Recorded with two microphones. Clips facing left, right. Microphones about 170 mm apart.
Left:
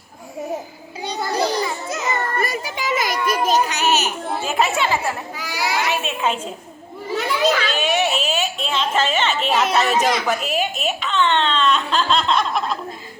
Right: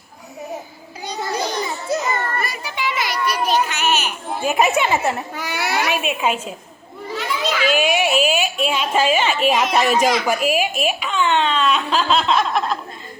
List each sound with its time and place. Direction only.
1.0 s a sound: 35° left (ahead or behind)
2.4 s children playing: 45° left (ahead or behind)
3.4 s a child's voice: 40° left (ahead or behind)
4.4 s a woman's voice: 15° right (ahead or behind)
5.3 s a child's voice: 60° right (ahead or behind)
5.9 s a woman's voice: 10° right (ahead or behind)
7.6 s a woman's voice: 10° right (ahead or behind)